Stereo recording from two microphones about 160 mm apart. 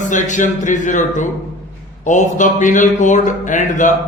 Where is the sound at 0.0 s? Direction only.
50° left (ahead or behind).